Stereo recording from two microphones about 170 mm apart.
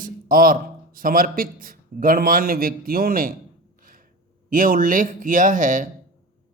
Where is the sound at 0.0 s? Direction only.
55° right (ahead or behind).